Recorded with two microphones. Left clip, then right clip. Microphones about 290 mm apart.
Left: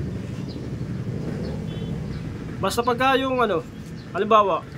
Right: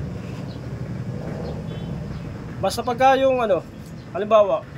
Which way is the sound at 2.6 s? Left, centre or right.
Centre.